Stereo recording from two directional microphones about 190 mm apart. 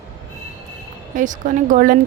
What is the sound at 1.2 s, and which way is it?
Speech, 45° right (ahead or behind).